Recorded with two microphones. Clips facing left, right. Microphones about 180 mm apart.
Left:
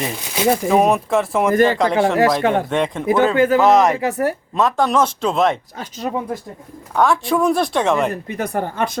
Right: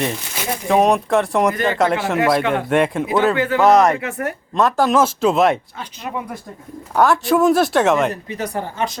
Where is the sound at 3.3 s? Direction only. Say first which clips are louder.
Left 5 dB; 45° left (ahead or behind).